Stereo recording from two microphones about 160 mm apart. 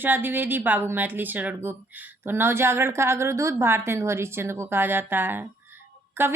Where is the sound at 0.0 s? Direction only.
10° right (ahead or behind).